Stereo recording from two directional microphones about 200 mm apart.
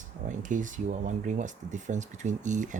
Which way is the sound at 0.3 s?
40° right (ahead or behind).